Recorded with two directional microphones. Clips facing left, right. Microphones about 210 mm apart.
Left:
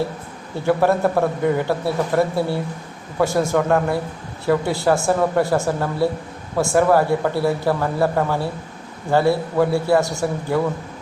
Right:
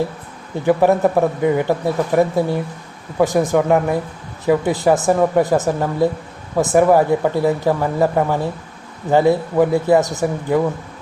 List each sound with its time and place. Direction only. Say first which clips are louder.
0.6 s speech: right 3 dB; 15° right (ahead or behind)